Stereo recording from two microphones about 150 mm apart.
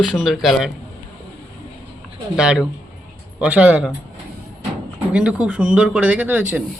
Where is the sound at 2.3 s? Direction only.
5° right (ahead or behind).